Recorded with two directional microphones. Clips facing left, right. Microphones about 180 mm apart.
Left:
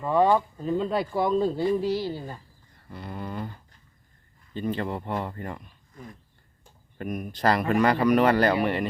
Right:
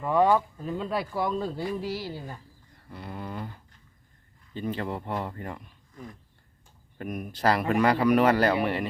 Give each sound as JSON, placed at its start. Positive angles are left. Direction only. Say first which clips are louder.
{"t": 0.6, "sound": "a sound", "louder": "left 4 dB", "side_deg": -5}
{"t": 1.3, "sound": "speech", "louder": "left 6 dB", "side_deg": 30}
{"t": 1.5, "sound": "speech", "louder": "left 7 dB", "side_deg": -5}
{"t": 4.5, "sound": "speech", "louder": "left 2 dB", "side_deg": -5}
{"t": 7.0, "sound": "speech", "louder": "left 1 dB", "side_deg": 0}